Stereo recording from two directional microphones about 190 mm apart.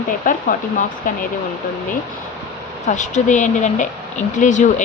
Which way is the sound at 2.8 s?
40° left (ahead or behind).